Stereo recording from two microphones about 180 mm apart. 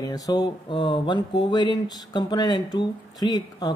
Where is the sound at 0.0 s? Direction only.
20° left (ahead or behind).